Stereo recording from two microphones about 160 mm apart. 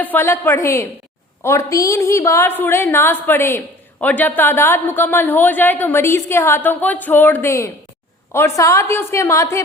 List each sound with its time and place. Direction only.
0.0 s a woman's voice: 15° left (ahead or behind)